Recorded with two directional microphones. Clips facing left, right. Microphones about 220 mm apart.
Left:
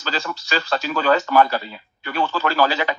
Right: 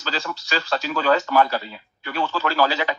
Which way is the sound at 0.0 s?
55° left (ahead or behind).